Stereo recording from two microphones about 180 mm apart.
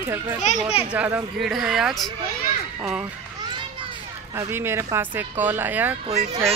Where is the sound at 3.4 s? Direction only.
25° right (ahead or behind).